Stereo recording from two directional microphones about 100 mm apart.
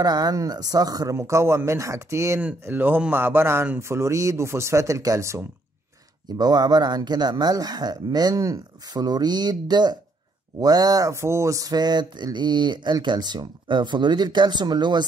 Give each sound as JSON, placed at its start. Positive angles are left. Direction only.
{"t": 0.0, "sound": "speech", "side_deg": -40}
{"t": 2.6, "sound": "speech", "side_deg": -20}
{"t": 6.3, "sound": "a sound", "side_deg": -40}